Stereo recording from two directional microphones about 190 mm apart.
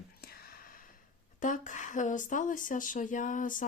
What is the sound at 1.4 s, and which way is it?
Speech, 40° left (ahead or behind).